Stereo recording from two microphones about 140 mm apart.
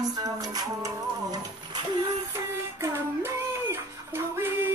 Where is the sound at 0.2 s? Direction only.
25° right (ahead or behind).